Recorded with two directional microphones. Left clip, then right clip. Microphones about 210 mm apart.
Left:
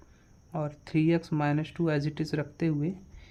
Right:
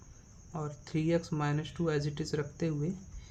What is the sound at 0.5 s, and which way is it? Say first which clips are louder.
Speech: left 7 dB; 35° left (ahead or behind).